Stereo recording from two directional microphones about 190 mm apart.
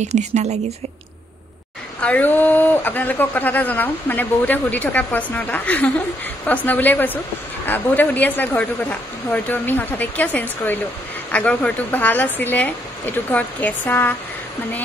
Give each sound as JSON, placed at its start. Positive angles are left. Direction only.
{"t": 0.0, "sound": "speech", "side_deg": -35}
{"t": 2.0, "sound": "speech", "side_deg": 5}